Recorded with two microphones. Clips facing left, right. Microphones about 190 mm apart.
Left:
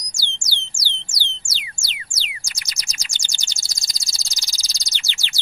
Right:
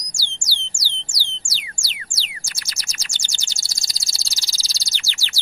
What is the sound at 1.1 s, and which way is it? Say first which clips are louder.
Music: left 1 dB; 20° left (ahead or behind).